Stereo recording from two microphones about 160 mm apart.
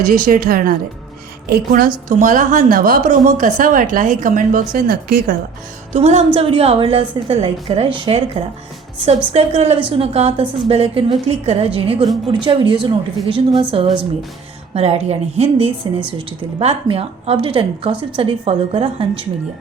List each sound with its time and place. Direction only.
0.0 s a woman's voice: 60° right (ahead or behind)
2.0 s a woman's voice: 55° right (ahead or behind); by 5.4 s 70° right (ahead or behind)
5.9 s a woman's voice: 45° right (ahead or behind)